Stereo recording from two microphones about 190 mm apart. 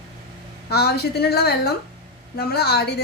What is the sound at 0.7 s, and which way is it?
A woman's voice, 60° left (ahead or behind).